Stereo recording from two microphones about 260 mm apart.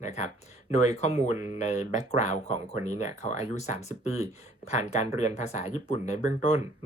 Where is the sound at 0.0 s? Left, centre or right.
Left.